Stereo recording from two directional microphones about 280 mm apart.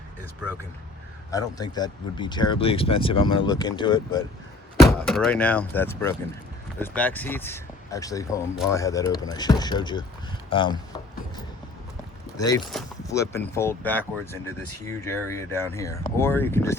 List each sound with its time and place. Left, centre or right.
1.3 s speech: centre
4.8 s speech: centre
12.4 s speech: centre